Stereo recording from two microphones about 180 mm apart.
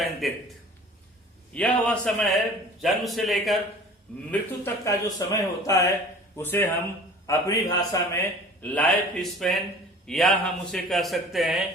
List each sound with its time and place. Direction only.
0.0 s a man's voice: centre (ahead or behind)
1.5 s a man's voice: 5° left (ahead or behind)
4.3 s speech: 15° left (ahead or behind)
8.6 s a man's voice: 10° left (ahead or behind)